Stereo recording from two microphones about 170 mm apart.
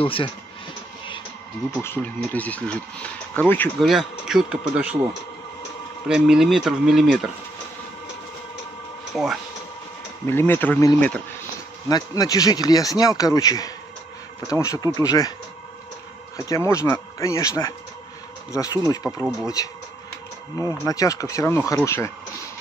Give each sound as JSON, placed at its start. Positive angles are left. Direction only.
{"t": 0.0, "sound": "speech", "side_deg": 30}
{"t": 1.8, "sound": "speech", "side_deg": 10}
{"t": 3.8, "sound": "speech", "side_deg": 0}
{"t": 6.0, "sound": "speech", "side_deg": -5}
{"t": 9.1, "sound": "speech", "side_deg": 0}
{"t": 10.2, "sound": "speech", "side_deg": 15}
{"t": 11.9, "sound": "speech", "side_deg": 20}
{"t": 16.3, "sound": "speech", "side_deg": 15}
{"t": 20.8, "sound": "speech", "side_deg": 20}